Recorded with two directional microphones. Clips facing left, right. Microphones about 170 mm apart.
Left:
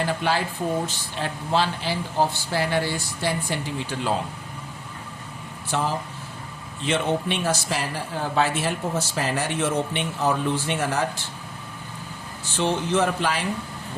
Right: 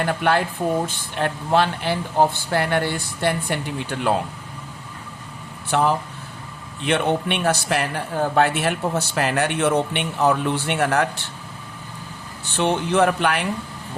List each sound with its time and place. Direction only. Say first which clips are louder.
0.0 s speech: right 4 dB; 60° right (ahead or behind)
5.7 s speech: right 6 dB; 65° right (ahead or behind)
12.5 s speech: right 3 dB; 60° right (ahead or behind)